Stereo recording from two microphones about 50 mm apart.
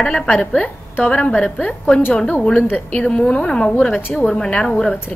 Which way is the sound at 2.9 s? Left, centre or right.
Left.